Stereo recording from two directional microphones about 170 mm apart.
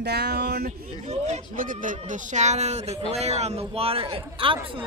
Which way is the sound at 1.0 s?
40° right (ahead or behind).